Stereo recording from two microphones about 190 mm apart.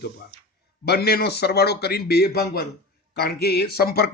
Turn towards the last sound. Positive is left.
turn(degrees=55)  # may be behind; listen again after turning